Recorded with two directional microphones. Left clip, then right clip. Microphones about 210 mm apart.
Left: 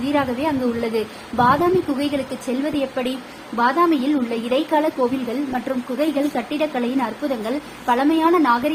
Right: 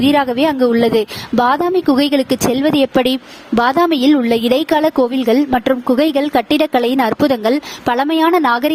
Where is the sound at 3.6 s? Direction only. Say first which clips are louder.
Right 4 dB; 55° right (ahead or behind).